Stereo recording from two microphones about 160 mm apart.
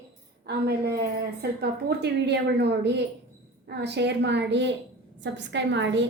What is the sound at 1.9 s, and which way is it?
A woman's voice, 90° right.